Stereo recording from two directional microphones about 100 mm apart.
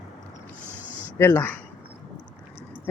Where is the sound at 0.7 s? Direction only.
20° right (ahead or behind).